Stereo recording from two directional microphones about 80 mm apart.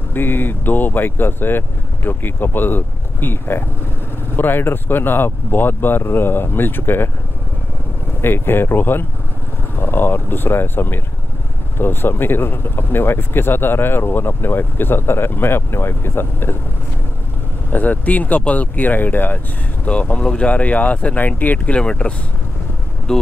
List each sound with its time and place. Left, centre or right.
0.1 s speech: left
8.2 s speech: left
17.6 s speech: left